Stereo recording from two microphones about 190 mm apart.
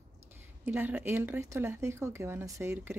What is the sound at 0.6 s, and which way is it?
Speech, 10° right (ahead or behind).